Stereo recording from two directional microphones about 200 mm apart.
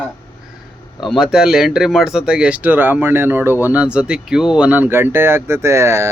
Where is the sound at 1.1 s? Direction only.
5° right (ahead or behind).